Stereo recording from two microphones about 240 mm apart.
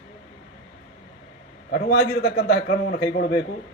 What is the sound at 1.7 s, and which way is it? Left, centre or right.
A man's voice, left.